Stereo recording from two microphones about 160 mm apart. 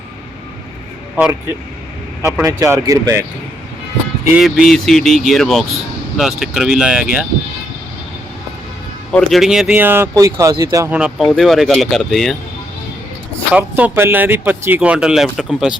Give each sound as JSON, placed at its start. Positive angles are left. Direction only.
{"t": 2.4, "sound": "speech", "side_deg": -20}
{"t": 4.4, "sound": "speech", "side_deg": 0}
{"t": 9.1, "sound": "speech", "side_deg": 0}
{"t": 10.9, "sound": "speech", "side_deg": -5}
{"t": 13.5, "sound": "speech", "side_deg": -10}